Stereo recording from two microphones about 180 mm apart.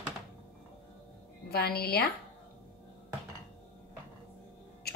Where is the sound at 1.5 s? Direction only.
60° left (ahead or behind).